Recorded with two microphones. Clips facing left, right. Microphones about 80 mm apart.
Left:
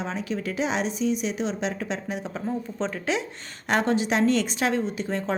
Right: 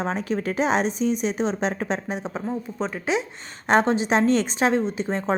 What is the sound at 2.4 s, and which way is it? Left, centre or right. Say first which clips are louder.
Speech: left 2 dB; centre.